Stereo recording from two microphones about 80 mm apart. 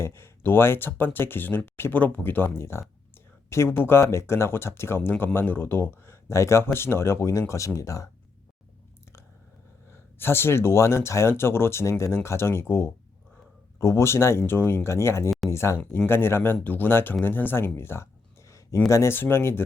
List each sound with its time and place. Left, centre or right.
0.0 s speech: left
10.2 s speech: left
17.7 s a sound: left
18.9 s speech: left